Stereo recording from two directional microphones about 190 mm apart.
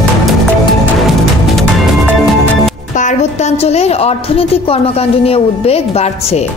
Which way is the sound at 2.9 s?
40° left (ahead or behind).